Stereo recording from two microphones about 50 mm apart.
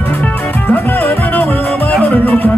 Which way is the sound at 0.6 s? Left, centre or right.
Left.